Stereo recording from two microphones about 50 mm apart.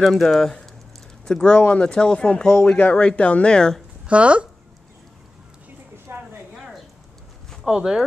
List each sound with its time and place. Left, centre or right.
0.0 s speech: centre
2.7 s speech: left
4.1 s speech: right
6.1 s a sound: right
6.5 s a sound: centre
7.6 s speech: centre